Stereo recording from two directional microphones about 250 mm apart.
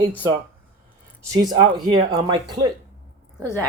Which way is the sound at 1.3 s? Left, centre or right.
Centre.